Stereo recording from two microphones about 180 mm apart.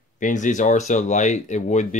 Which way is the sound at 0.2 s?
45° left (ahead or behind).